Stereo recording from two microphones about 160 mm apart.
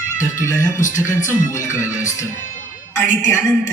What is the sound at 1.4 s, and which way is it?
Music, 50° left (ahead or behind).